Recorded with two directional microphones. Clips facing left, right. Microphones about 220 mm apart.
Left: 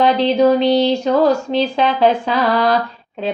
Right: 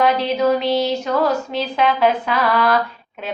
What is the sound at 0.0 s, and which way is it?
Mantra, 30° left (ahead or behind).